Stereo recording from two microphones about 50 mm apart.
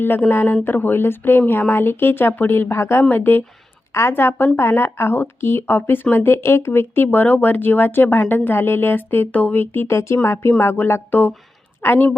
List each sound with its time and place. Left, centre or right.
0.3 s speech: left
2.7 s a woman's voice: left
3.0 s a woman's voice: left
9.3 s speech: left
9.8 s speech: left
10.2 s a woman's voice: left